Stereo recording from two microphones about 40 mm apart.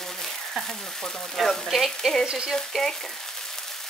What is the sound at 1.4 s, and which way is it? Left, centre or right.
Speech, centre.